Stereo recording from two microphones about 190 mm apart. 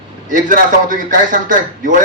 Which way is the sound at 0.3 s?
45° right (ahead or behind).